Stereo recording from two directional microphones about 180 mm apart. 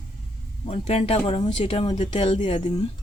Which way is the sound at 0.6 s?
35° left (ahead or behind).